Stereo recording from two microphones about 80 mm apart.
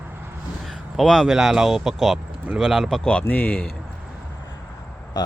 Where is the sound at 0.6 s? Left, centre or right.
Centre.